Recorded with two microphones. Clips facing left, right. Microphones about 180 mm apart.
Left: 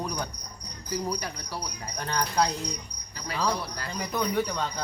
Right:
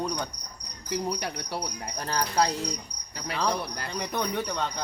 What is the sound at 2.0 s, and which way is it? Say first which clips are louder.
Speech: even; 35° right (ahead or behind).